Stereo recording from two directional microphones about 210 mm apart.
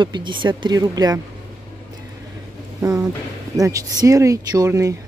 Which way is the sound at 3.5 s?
15° right (ahead or behind).